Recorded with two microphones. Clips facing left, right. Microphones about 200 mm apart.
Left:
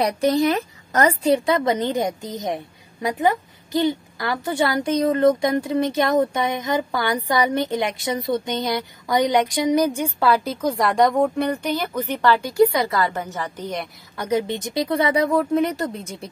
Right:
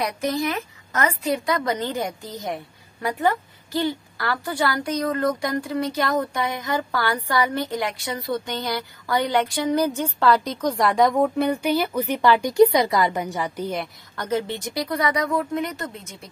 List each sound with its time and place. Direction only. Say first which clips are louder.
0.0 s a woman's voice: left 6 dB; 35° left (ahead or behind); by 13.8 s 10° right (ahead or behind)
14.1 s a woman's voice: left 3 dB; 10° left (ahead or behind); by 16.3 s 35° left (ahead or behind)